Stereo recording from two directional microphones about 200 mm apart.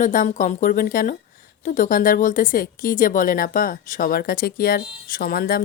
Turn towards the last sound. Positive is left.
turn(degrees=50)  # may be behind; listen again after turning